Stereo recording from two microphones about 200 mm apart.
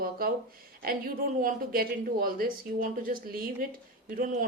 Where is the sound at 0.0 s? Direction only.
50° right (ahead or behind).